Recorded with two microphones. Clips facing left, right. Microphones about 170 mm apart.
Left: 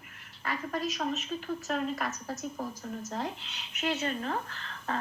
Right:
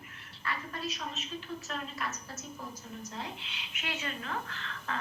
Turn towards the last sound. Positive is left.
turn(degrees=40)  # may be behind; listen again after turning